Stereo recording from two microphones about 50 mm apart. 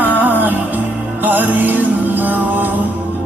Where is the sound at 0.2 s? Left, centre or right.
Right.